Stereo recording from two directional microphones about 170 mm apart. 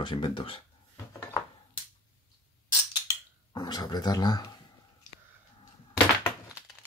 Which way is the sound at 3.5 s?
25° left (ahead or behind).